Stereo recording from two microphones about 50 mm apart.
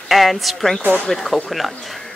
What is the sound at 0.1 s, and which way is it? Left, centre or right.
Speech, centre.